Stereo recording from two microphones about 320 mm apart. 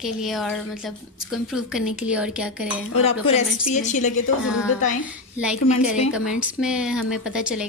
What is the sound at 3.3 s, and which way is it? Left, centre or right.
Speech, left.